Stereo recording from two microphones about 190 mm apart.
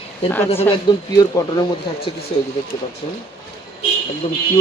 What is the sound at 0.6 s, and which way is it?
Speech, 20° left (ahead or behind).